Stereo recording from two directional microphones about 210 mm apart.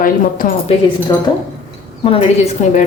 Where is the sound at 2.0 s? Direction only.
30° left (ahead or behind).